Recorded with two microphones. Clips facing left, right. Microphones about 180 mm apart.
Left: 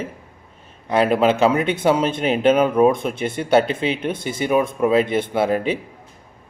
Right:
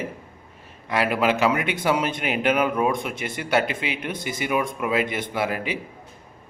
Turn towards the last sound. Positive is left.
turn(degrees=25)  # may be behind; listen again after turning